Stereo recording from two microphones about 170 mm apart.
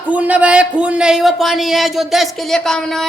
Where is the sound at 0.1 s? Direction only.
10° right (ahead or behind).